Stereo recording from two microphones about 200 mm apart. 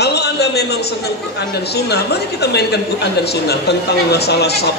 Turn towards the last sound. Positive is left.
turn(degrees=55)  # may be behind; listen again after turning